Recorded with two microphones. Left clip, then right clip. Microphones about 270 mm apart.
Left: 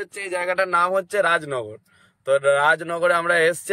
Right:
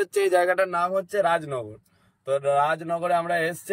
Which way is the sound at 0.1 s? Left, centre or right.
Right.